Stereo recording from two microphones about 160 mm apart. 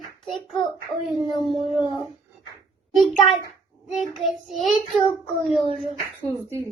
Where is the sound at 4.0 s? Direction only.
Centre (ahead or behind).